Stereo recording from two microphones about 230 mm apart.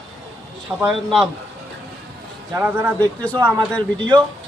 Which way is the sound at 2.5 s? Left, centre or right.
Centre.